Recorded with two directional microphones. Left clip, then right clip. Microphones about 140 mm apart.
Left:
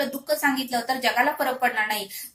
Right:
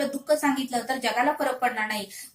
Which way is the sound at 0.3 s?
25° left (ahead or behind).